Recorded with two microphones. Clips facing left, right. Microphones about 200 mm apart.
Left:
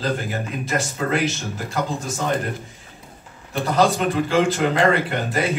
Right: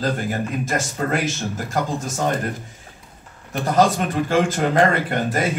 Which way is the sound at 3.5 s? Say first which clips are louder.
Right 1 dB; 45° right (ahead or behind).